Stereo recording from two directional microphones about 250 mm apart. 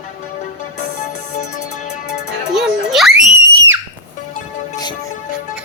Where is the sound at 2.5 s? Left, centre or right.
Centre.